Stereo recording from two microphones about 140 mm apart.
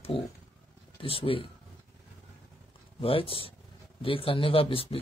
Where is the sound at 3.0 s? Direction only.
40° left (ahead or behind).